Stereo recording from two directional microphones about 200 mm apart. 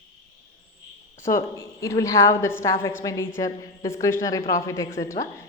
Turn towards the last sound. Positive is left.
turn(degrees=15)  # may be behind; listen again after turning